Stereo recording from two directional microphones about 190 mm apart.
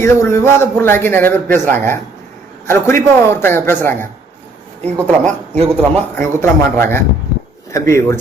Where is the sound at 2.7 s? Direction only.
15° left (ahead or behind).